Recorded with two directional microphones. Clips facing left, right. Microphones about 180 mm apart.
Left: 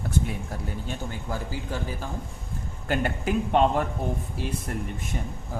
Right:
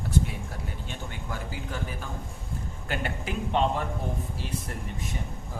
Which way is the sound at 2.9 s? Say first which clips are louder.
Left 7 dB; 45° left (ahead or behind).